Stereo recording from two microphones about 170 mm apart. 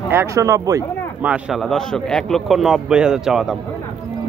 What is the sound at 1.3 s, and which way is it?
A man's voice, centre (ahead or behind).